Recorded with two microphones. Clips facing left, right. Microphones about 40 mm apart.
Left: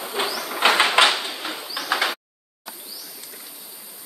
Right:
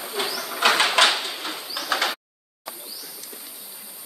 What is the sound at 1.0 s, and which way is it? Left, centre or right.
Bird, centre.